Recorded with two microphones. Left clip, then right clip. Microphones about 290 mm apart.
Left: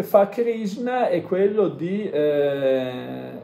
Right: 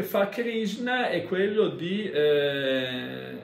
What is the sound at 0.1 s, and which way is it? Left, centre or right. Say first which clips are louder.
Speech: left 10 dB; centre.